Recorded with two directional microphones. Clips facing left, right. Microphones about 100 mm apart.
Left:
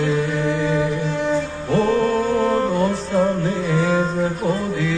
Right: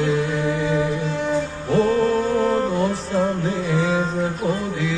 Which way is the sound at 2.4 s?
Centre (ahead or behind).